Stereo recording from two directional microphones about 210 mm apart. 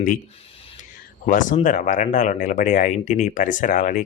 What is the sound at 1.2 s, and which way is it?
Speech, 40° left (ahead or behind).